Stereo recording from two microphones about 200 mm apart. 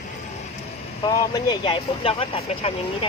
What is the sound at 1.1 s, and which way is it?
Speech, 20° left (ahead or behind).